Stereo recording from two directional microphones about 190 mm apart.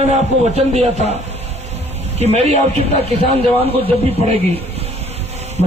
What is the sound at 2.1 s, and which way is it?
A man's voice, 35° right (ahead or behind).